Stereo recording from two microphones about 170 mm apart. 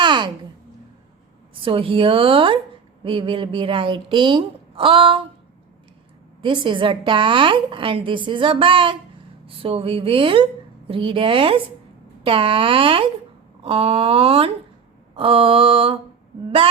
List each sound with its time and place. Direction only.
0.0 s a sound: 25° right (ahead or behind)
1.6 s speech: 30° right (ahead or behind)
6.4 s a woman's voice: 30° right (ahead or behind)